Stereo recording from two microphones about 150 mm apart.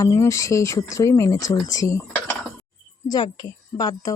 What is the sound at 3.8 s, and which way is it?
Speech, 25° left (ahead or behind).